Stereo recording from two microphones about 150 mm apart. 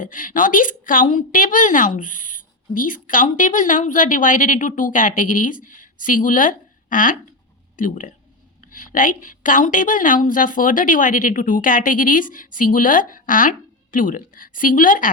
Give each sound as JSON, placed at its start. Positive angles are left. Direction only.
{"t": 0.0, "sound": "a woman's voice", "side_deg": 65}